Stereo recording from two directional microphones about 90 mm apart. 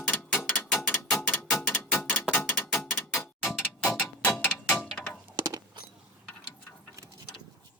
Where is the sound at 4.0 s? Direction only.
15° left (ahead or behind).